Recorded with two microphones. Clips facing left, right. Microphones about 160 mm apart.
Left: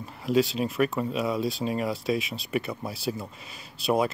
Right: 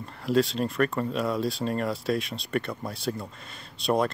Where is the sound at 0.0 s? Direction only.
Centre (ahead or behind).